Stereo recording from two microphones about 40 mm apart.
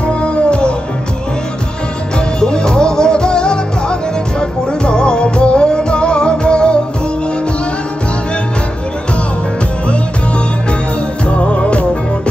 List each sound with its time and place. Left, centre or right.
0.0 s music: left
2.1 s music: centre
11.2 s music: left